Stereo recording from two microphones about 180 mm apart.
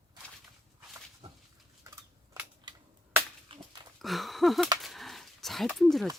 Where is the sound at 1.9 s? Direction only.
20° right (ahead or behind).